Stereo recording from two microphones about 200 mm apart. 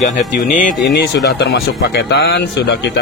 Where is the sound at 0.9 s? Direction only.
55° left (ahead or behind).